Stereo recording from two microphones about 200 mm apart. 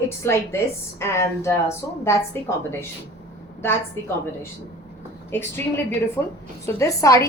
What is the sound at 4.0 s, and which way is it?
Speech, 15° left (ahead or behind).